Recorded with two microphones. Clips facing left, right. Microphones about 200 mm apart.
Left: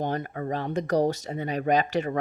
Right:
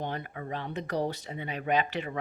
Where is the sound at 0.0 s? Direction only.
45° left (ahead or behind).